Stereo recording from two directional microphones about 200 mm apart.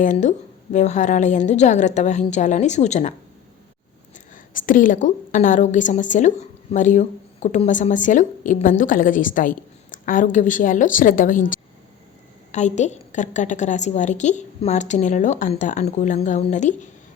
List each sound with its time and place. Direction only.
0.0 s a woman's voice: 40° left (ahead or behind)
4.5 s a woman's voice: 40° left (ahead or behind)